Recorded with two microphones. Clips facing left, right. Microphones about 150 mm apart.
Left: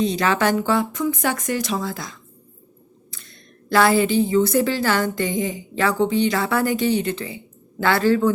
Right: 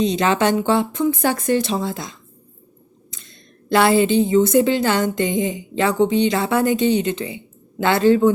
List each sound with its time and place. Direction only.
0.0 s a woman's voice: 20° right (ahead or behind)